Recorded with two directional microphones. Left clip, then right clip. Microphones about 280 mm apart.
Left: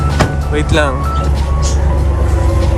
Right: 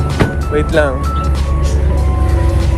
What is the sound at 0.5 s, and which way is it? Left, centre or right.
Music, centre.